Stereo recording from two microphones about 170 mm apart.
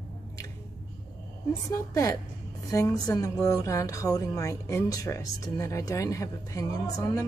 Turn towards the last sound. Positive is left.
turn(degrees=20)  # may be behind; listen again after turning